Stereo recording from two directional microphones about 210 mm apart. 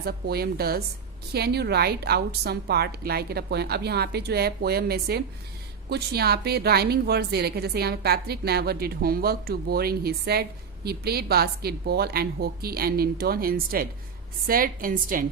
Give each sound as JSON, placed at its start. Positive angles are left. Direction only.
{"t": 0.0, "sound": "a woman's voice", "side_deg": -50}